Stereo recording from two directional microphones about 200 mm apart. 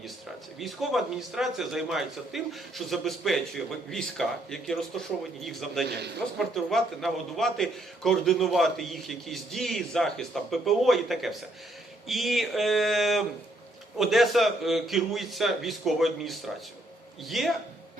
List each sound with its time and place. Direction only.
0.6 s a man's voice: centre (ahead or behind)
5.8 s a man's voice: 55° right (ahead or behind)
6.4 s a man's voice: centre (ahead or behind)